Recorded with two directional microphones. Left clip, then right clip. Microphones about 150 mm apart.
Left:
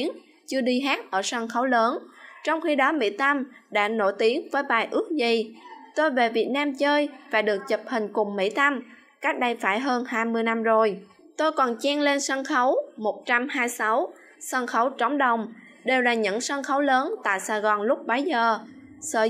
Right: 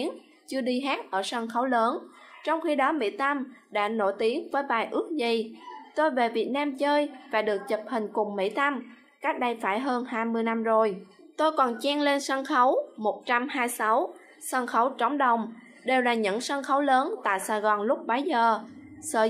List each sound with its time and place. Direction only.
0.0 s a woman's voice: 15° left (ahead or behind)